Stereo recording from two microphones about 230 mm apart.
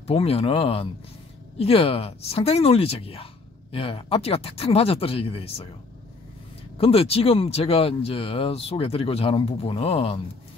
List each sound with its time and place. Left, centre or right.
0.0 s speech: left
6.8 s speech: left